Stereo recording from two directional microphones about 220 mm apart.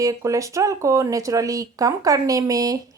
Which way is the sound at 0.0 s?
15° right (ahead or behind).